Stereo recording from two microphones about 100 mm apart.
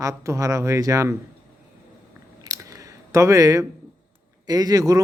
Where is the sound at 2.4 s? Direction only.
35° right (ahead or behind).